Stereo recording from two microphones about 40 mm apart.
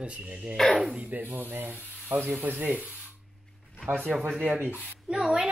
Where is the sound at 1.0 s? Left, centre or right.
Right.